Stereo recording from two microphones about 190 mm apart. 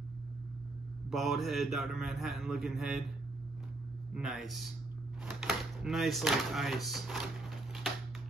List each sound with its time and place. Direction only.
1.1 s speech: centre (ahead or behind)
4.1 s speech: centre (ahead or behind)